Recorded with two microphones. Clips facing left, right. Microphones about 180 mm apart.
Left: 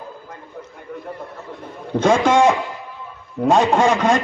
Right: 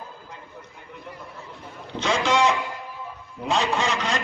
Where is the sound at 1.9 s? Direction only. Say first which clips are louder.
Left 8 dB; 50° left (ahead or behind).